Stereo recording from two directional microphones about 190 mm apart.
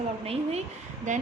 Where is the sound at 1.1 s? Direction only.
40° right (ahead or behind).